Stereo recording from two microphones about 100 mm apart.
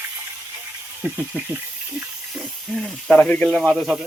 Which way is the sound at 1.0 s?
20° right (ahead or behind).